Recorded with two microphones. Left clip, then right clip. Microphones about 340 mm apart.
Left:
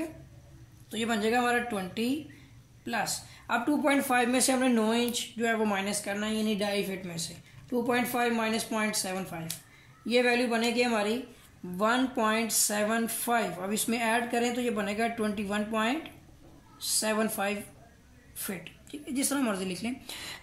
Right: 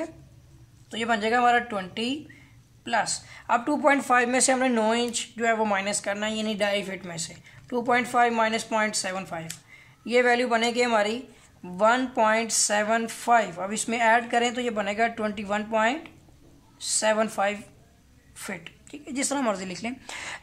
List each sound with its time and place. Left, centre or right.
0.9 s speech: right